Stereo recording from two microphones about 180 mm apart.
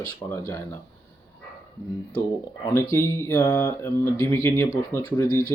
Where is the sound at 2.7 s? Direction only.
15° left (ahead or behind).